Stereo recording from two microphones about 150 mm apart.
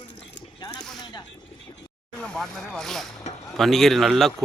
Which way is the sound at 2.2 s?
5° left (ahead or behind).